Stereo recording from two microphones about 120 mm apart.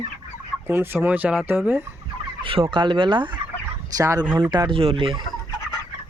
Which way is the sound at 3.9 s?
30° right (ahead or behind).